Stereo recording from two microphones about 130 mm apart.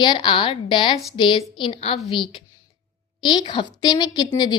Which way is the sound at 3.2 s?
35° left (ahead or behind).